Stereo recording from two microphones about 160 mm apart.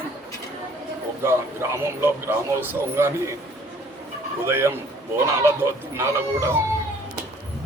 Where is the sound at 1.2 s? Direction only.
15° right (ahead or behind).